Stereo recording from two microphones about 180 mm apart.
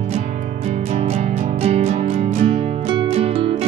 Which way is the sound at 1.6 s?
35° right (ahead or behind).